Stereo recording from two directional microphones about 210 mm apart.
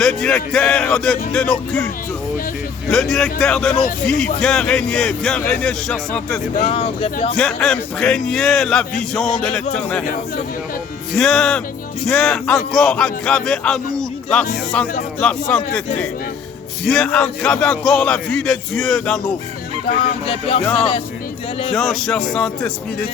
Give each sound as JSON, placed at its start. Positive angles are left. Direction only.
{"t": 0.0, "sound": "speech", "side_deg": 5}
{"t": 2.9, "sound": "speech", "side_deg": 0}
{"t": 6.7, "sound": "speech", "side_deg": 25}
{"t": 7.3, "sound": "speech", "side_deg": 0}
{"t": 11.1, "sound": "speech", "side_deg": 0}
{"t": 16.8, "sound": "speech", "side_deg": 0}
{"t": 20.2, "sound": "speech", "side_deg": 25}
{"t": 20.6, "sound": "speech", "side_deg": 5}